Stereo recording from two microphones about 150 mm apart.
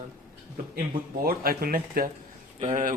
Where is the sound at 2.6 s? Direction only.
55° right (ahead or behind).